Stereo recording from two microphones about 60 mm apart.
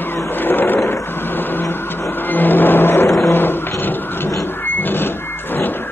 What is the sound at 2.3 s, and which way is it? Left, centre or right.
Music, left.